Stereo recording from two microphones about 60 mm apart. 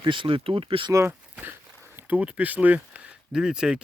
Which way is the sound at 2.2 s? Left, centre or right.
Right.